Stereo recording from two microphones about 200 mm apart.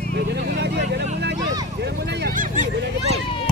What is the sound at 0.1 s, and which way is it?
Vehicle, 60° right (ahead or behind).